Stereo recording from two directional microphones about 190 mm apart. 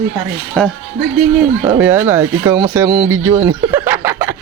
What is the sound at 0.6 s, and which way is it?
Speech, 5° left (ahead or behind).